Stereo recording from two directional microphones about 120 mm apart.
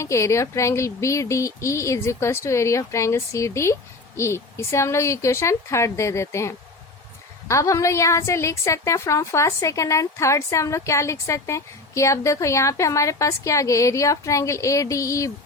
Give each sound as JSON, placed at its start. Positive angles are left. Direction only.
{"t": 0.0, "sound": "a woman's voice", "side_deg": 25}